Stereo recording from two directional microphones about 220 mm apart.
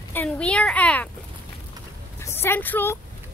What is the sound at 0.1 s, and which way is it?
Speech, 5° left (ahead or behind).